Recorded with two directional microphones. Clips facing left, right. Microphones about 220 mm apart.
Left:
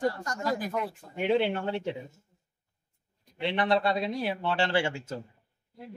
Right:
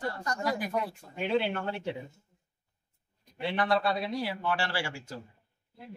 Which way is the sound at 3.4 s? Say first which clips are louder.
Left 2 dB; 20° left (ahead or behind).